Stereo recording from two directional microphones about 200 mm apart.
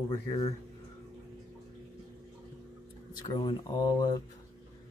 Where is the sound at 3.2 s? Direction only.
20° left (ahead or behind).